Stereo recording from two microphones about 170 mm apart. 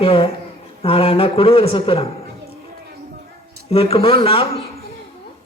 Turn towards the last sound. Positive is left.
turn(degrees=35)  # may be behind; listen again after turning